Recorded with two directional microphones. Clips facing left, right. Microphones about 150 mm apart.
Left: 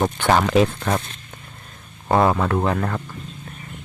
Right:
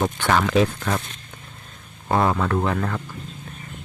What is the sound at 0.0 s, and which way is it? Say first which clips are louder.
Speech: left 2 dB; 20° left (ahead or behind).